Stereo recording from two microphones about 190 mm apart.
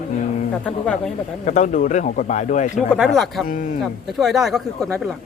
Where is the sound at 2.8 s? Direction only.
Centre (ahead or behind).